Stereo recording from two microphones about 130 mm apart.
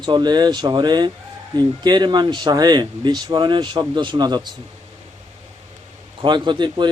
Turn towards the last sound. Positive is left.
turn(degrees=-35)  # may be behind; listen again after turning